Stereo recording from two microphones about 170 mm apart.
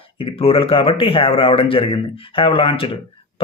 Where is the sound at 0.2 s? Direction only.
35° left (ahead or behind).